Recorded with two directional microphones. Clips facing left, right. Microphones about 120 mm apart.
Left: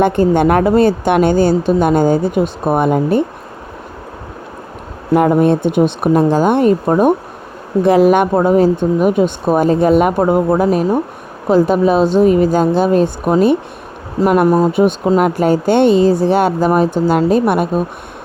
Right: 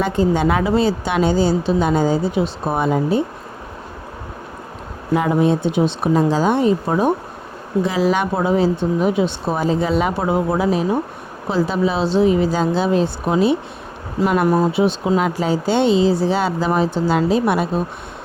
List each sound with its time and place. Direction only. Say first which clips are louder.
0.0 s a woman's voice: left 6 dB; 60° left (ahead or behind)
5.1 s a woman's voice: left 5 dB; 55° left (ahead or behind)